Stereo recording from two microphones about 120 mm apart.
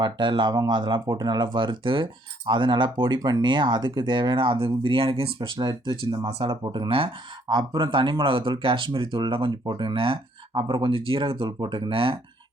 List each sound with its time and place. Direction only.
0.0 s speech: 40° right (ahead or behind)
5.5 s speech: 40° right (ahead or behind)
6.1 s speech: 50° right (ahead or behind)